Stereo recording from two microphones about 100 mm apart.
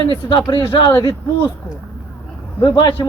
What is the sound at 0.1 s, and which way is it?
Speech, 55° left (ahead or behind).